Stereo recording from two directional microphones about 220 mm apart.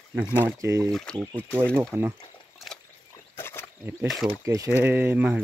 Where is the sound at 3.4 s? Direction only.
10° left (ahead or behind).